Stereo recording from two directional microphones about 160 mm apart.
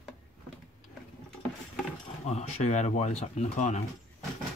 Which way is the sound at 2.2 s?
45° left (ahead or behind).